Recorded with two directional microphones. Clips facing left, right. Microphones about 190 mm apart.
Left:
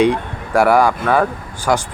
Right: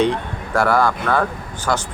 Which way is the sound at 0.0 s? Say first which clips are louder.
Left 4 dB; 10° left (ahead or behind).